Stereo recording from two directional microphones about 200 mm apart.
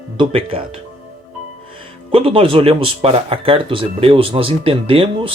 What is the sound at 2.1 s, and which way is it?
Speech, 25° right (ahead or behind).